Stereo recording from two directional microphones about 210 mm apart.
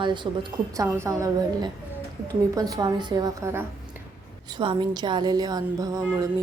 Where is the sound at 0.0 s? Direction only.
20° right (ahead or behind).